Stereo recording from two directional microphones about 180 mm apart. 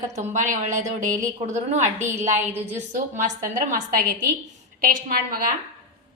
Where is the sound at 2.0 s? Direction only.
15° right (ahead or behind).